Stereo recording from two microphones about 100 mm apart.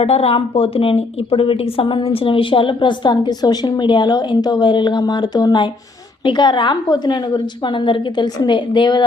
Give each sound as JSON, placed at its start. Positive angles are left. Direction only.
{"t": 0.0, "sound": "a woman's voice", "side_deg": 80}